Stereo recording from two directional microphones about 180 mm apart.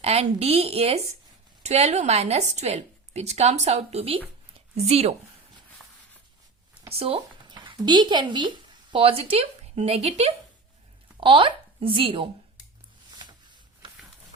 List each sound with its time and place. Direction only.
0.0 s a woman's voice: 35° right (ahead or behind)
6.9 s speech: 30° right (ahead or behind)
13.8 s a sound: 30° right (ahead or behind)